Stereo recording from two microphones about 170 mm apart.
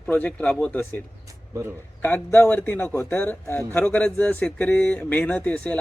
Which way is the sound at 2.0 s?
10° left (ahead or behind).